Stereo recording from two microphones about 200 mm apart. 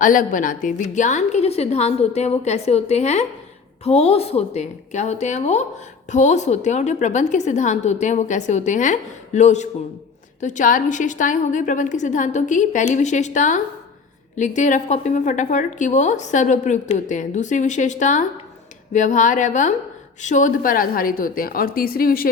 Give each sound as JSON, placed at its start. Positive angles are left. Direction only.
{"t": 0.0, "sound": "a woman's voice", "side_deg": 40}